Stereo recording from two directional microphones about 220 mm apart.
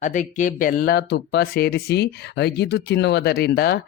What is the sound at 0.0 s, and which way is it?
Speech, 35° left (ahead or behind).